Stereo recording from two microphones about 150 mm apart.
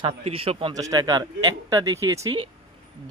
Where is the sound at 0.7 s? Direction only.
25° right (ahead or behind).